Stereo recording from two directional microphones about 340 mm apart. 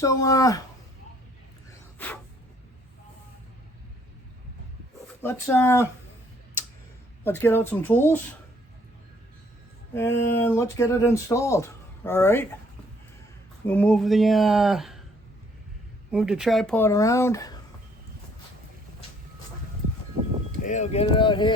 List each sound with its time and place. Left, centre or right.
0.0 s speech: centre
5.2 s speech: centre
7.3 s speech: centre
9.9 s speech: centre
13.7 s speech: centre
16.1 s speech: centre
20.7 s speech: left